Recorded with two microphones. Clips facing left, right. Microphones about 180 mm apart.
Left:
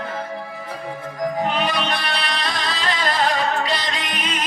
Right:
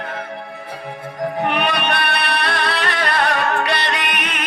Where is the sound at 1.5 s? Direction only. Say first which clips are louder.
Right 2 dB; 65° right (ahead or behind).